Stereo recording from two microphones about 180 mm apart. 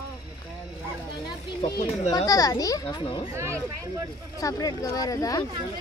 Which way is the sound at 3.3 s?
15° right (ahead or behind).